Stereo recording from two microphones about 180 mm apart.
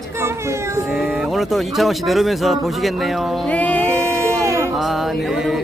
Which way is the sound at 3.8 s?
15° right (ahead or behind).